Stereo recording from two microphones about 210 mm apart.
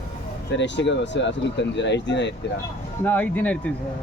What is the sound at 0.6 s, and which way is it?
Speech, 55° left (ahead or behind).